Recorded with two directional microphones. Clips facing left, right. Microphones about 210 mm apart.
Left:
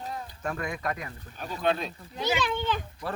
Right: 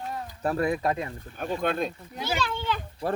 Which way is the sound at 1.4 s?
50° right (ahead or behind).